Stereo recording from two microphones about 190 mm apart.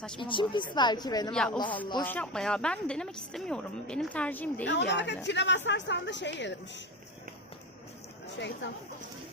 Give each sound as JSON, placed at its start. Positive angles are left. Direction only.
{"t": 0.2, "sound": "a woman's voice", "side_deg": 25}
{"t": 1.3, "sound": "a woman's voice", "side_deg": 5}
{"t": 1.5, "sound": "a woman's voice", "side_deg": 25}
{"t": 2.0, "sound": "a woman's voice", "side_deg": 5}
{"t": 4.7, "sound": "a woman's voice", "side_deg": 65}
{"t": 8.4, "sound": "a woman's voice", "side_deg": 65}